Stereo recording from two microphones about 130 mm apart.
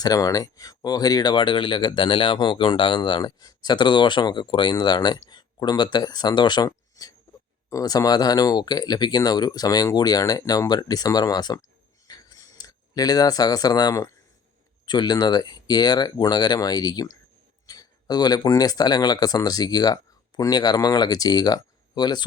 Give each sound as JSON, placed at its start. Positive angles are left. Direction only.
{"t": 0.0, "sound": "speech", "side_deg": 30}
{"t": 12.0, "sound": "a sound", "side_deg": 30}
{"t": 14.8, "sound": "speech", "side_deg": 35}